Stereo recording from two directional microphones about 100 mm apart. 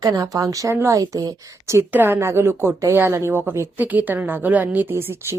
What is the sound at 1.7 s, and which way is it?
A woman's voice, 25° right (ahead or behind).